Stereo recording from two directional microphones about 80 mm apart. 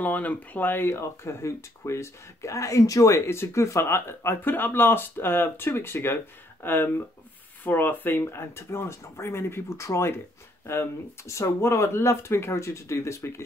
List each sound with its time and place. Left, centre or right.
0.0 s speech: centre; by 13.4 s left